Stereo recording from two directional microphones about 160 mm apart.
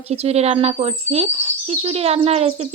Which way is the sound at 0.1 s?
40° right (ahead or behind).